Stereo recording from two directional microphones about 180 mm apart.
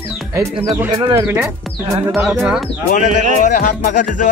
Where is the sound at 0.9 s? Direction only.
20° right (ahead or behind).